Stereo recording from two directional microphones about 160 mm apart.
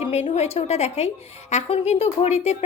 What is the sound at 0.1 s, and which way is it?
A woman's voice, 40° left (ahead or behind).